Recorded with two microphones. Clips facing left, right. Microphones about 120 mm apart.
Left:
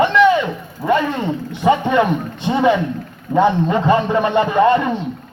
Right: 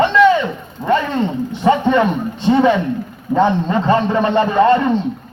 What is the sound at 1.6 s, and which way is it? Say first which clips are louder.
Speech: right 1 dB; 15° left (ahead or behind).